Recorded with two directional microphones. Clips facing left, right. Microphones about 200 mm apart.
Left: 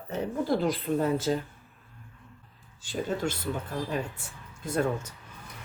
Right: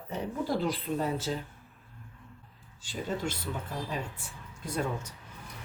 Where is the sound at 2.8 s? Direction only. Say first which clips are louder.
Left 4 dB; 50° left (ahead or behind).